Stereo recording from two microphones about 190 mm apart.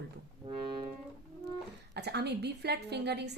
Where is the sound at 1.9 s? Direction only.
60° right (ahead or behind).